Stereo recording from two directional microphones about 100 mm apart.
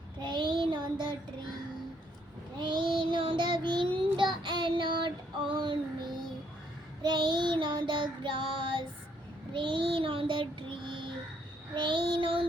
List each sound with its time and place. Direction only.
0.2 s child singing: 50° right (ahead or behind)
2.6 s child singing: 50° right (ahead or behind)